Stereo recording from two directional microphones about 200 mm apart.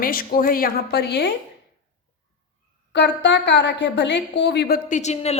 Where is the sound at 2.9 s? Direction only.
60° left (ahead or behind).